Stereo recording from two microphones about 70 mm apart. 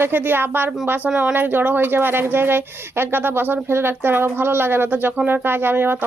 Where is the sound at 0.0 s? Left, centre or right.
Right.